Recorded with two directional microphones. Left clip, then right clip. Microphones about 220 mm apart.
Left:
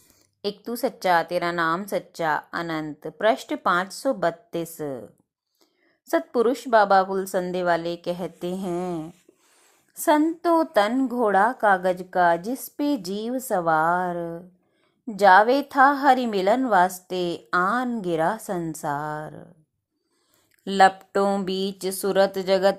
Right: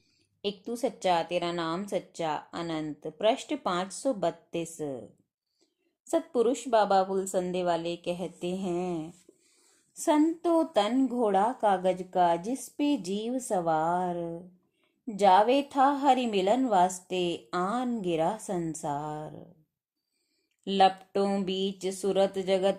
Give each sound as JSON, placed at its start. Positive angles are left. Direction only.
{"t": 0.6, "sound": "a woman's voice", "side_deg": 10}
{"t": 6.1, "sound": "a woman's voice", "side_deg": 15}
{"t": 10.4, "sound": "a woman's voice", "side_deg": 10}
{"t": 20.7, "sound": "speech", "side_deg": 20}
{"t": 21.3, "sound": "music", "side_deg": 20}